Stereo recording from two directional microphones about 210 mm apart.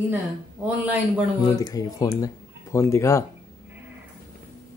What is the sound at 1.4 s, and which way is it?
Speech, 15° left (ahead or behind).